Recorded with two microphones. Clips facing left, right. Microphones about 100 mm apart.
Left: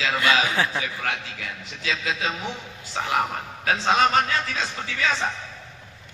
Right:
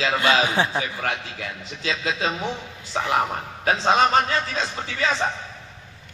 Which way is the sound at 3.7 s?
30° right (ahead or behind).